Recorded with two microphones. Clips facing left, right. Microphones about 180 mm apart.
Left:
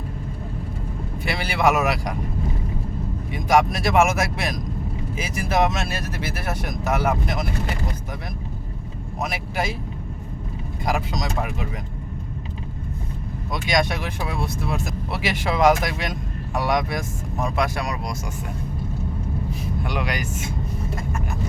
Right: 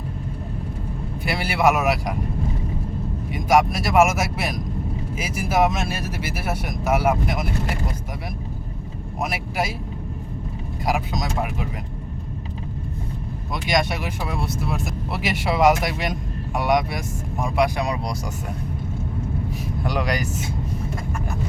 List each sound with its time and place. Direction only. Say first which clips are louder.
1.2 s speech: right 1 dB; 5° right (ahead or behind)
3.3 s speech: right 1 dB; 5° right (ahead or behind)
9.2 s speech: right 1 dB; 5° right (ahead or behind)
10.8 s speech: right 1 dB; 5° right (ahead or behind)
13.7 s speech: even; 5° right (ahead or behind)
17.4 s speech: right 3 dB; 15° right (ahead or behind)
19.8 s speech: right 4 dB; 35° right (ahead or behind)